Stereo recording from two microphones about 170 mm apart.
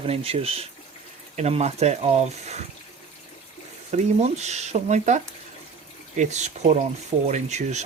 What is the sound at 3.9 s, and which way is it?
Speech, 40° right (ahead or behind).